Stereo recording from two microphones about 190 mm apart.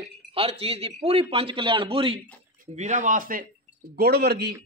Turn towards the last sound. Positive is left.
turn(degrees=-60)  # may be behind; listen again after turning